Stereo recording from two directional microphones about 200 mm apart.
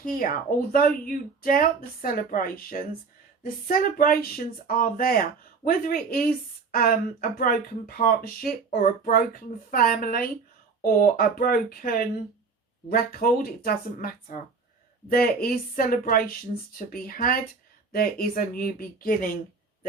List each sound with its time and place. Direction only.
0.0 s speech: 45° left (ahead or behind)